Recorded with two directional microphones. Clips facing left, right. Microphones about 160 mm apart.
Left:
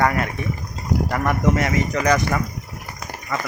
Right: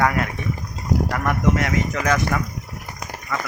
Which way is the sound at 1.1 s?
Centre (ahead or behind).